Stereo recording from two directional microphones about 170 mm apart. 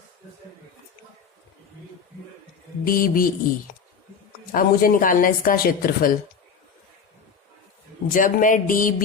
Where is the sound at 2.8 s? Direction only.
55° left (ahead or behind).